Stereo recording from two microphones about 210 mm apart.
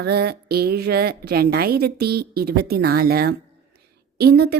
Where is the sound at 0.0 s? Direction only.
50° right (ahead or behind).